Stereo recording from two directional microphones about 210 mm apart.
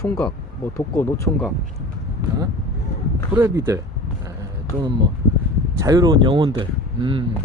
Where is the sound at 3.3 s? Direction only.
10° right (ahead or behind).